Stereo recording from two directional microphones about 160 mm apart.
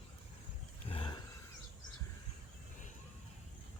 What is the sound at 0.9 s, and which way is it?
Roaring cats, 30° left (ahead or behind).